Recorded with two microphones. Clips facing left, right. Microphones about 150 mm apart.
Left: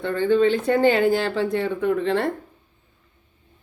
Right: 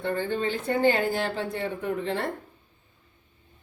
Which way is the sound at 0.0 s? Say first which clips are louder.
Left 9 dB; 90° left.